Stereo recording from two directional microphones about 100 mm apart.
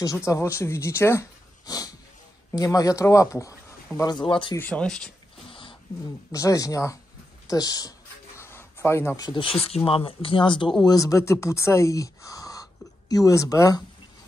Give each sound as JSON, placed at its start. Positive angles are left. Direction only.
{"t": 0.3, "sound": "speech", "side_deg": 30}
{"t": 1.7, "sound": "speech", "side_deg": 40}
{"t": 4.1, "sound": "speech", "side_deg": 55}
{"t": 4.6, "sound": "speech", "side_deg": 10}
{"t": 5.5, "sound": "a sound", "side_deg": 60}
{"t": 6.3, "sound": "speech", "side_deg": 35}
{"t": 8.4, "sound": "a sound", "side_deg": 25}
{"t": 9.1, "sound": "speech", "side_deg": 40}
{"t": 9.4, "sound": "speech", "side_deg": 80}
{"t": 9.8, "sound": "speech", "side_deg": 65}
{"t": 10.8, "sound": "speech", "side_deg": 35}